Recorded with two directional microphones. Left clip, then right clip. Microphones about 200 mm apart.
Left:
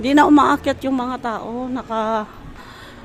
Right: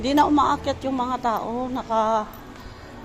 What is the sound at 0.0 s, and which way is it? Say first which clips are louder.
A man's voice: left 6 dB; 35° left (ahead or behind).